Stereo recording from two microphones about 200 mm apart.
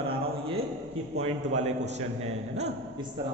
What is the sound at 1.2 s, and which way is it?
A man's voice, 35° right (ahead or behind).